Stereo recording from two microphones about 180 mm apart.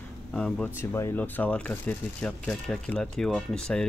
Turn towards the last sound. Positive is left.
turn(degrees=5)  # may be behind; listen again after turning